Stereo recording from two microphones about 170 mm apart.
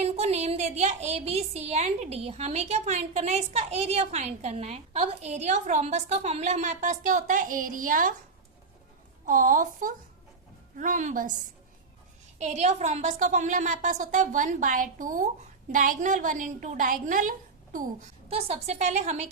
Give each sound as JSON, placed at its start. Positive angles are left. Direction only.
{"t": 0.0, "sound": "a woman's voice", "side_deg": -40}
{"t": 9.2, "sound": "a woman's voice", "side_deg": -55}
{"t": 12.4, "sound": "a woman's voice", "side_deg": -40}
{"t": 18.3, "sound": "a woman's voice", "side_deg": -35}